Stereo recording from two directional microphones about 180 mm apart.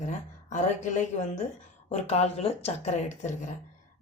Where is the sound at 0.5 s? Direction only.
40° left (ahead or behind).